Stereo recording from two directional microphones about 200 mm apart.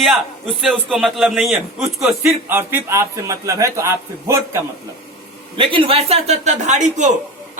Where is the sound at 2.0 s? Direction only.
10° right (ahead or behind).